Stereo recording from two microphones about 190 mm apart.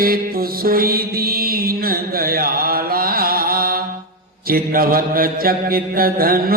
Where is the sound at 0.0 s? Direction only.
50° right (ahead or behind).